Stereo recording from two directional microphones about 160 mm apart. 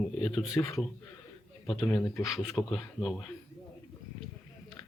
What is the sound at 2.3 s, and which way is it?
Speech, centre (ahead or behind).